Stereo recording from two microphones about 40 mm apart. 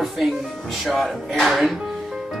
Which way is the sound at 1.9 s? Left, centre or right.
Centre.